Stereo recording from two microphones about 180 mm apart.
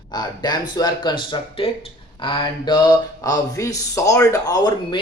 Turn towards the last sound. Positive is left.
turn(degrees=20)  # may be behind; listen again after turning